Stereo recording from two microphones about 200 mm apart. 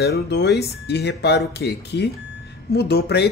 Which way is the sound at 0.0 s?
55° left (ahead or behind).